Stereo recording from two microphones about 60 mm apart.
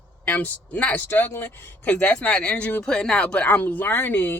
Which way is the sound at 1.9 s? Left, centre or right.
Left.